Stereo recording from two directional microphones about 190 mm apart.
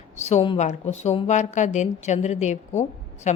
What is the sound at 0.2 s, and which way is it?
A woman's voice, 35° left (ahead or behind).